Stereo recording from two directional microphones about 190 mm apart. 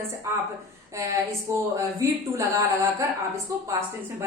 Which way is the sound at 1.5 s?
15° right (ahead or behind).